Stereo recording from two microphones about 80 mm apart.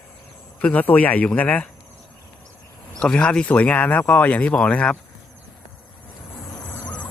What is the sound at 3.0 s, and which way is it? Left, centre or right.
Speech, centre.